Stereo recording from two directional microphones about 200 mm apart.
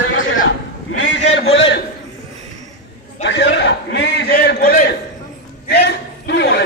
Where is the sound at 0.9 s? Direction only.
65° left (ahead or behind).